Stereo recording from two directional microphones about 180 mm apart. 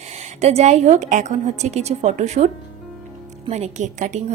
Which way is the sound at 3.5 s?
40° right (ahead or behind).